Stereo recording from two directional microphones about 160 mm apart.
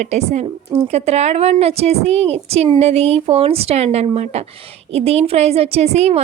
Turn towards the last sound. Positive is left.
turn(degrees=-40)  # may be behind; listen again after turning